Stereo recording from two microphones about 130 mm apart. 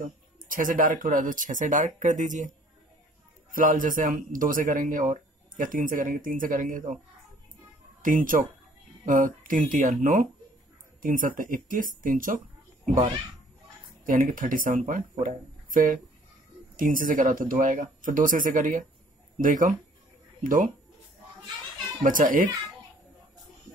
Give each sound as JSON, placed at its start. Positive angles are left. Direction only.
{"t": 0.0, "sound": "a man's voice", "side_deg": -90}
{"t": 3.5, "sound": "a man's voice", "side_deg": -90}
{"t": 8.0, "sound": "a man's voice", "side_deg": -90}
{"t": 14.0, "sound": "a man's voice", "side_deg": -90}
{"t": 22.0, "sound": "a man's voice", "side_deg": -90}